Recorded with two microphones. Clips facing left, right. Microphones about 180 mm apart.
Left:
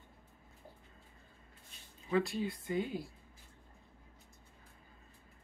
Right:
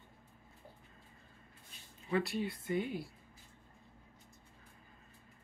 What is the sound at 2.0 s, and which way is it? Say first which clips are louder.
Speech: left 1 dB; centre (ahead or behind).